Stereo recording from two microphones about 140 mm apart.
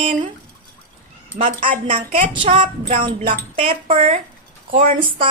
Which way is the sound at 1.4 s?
70° right (ahead or behind).